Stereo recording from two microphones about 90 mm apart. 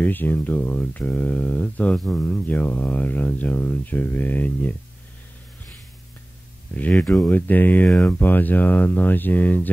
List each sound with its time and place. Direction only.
0.0 s speech: 20° left (ahead or behind)
6.7 s speech: 15° left (ahead or behind)